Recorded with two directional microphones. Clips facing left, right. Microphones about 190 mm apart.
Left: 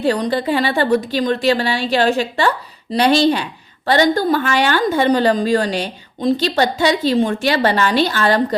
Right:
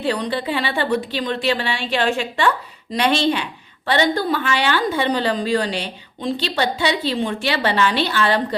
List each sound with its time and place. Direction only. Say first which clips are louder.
0.0 s a woman's voice: left 5 dB; 45° left (ahead or behind)